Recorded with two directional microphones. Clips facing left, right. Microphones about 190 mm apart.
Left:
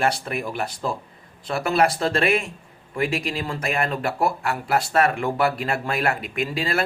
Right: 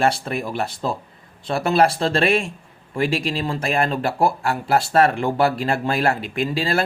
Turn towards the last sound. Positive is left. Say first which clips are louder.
# right 3 dB
turn(degrees=-30)  # may be behind; listen again after turning